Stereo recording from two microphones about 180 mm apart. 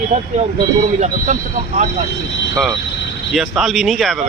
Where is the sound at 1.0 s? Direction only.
40° right (ahead or behind).